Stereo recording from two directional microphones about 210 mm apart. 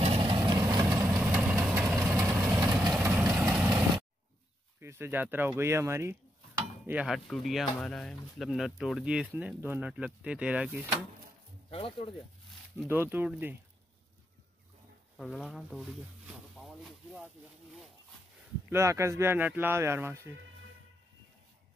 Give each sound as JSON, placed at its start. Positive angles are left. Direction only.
{"t": 0.0, "sound": "vehicle", "side_deg": -25}
{"t": 4.7, "sound": "chopping", "side_deg": -10}
{"t": 7.8, "sound": "speech", "side_deg": 0}
{"t": 11.7, "sound": "speech", "side_deg": 25}
{"t": 12.7, "sound": "speech", "side_deg": -10}
{"t": 15.1, "sound": "speech", "side_deg": 0}
{"t": 16.3, "sound": "a sound", "side_deg": 0}
{"t": 18.7, "sound": "speech", "side_deg": -15}